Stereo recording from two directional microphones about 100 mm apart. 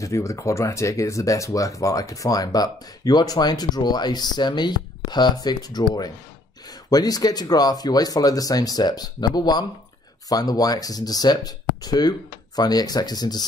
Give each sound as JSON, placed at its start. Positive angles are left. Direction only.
{"t": 0.0, "sound": "speech", "side_deg": 30}
{"t": 6.9, "sound": "speech", "side_deg": 40}